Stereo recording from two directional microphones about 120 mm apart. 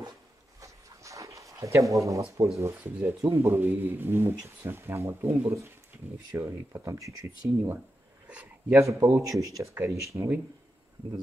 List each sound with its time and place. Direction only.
0.6 s writing: 25° right (ahead or behind)
2.6 s speech: 25° right (ahead or behind)
8.3 s a sound: 10° right (ahead or behind)
8.7 s speech: 25° right (ahead or behind)